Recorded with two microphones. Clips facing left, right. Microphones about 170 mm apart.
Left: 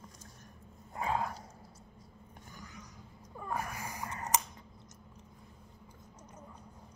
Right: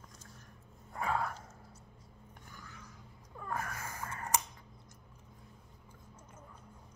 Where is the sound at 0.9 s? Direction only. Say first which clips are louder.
Left 1 dB; 20° left (ahead or behind).